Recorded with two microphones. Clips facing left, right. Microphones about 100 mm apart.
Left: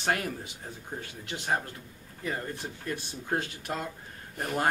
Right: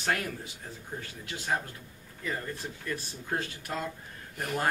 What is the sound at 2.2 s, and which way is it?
A man's voice, 25° left (ahead or behind).